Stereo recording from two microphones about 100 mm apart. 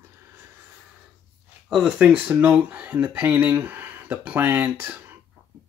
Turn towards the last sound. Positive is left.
turn(degrees=-20)  # may be behind; listen again after turning